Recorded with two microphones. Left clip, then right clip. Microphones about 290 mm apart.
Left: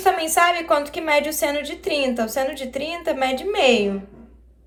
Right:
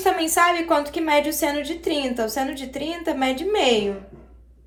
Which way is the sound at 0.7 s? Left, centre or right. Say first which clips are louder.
Left 1 dB; left.